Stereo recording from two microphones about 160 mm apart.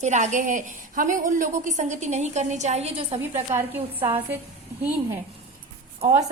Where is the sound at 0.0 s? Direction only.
50° right (ahead or behind).